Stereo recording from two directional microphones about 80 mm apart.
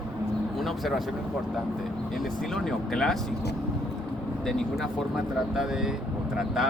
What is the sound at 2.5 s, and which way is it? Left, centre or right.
Speech, centre.